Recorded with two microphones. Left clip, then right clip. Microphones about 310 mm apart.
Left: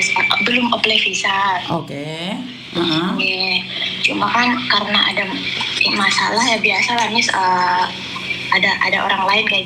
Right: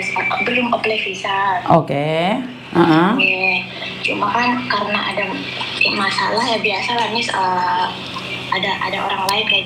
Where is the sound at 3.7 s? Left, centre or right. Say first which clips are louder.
Left 3 dB; left.